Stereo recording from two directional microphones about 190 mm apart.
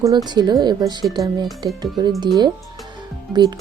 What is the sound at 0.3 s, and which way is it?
Speech, 20° right (ahead or behind).